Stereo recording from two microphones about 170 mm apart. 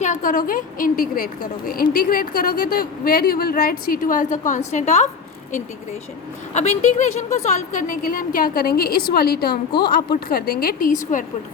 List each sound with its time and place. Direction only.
0.0 s a woman's voice: 50° left (ahead or behind)
6.5 s a woman's voice: 40° left (ahead or behind)